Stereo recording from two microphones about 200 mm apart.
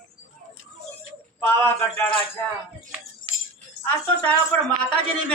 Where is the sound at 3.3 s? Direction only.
25° right (ahead or behind).